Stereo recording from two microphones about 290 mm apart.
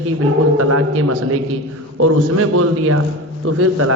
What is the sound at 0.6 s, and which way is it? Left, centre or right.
A man's voice, right.